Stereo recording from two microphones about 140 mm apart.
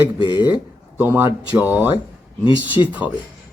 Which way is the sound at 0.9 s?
15° right (ahead or behind).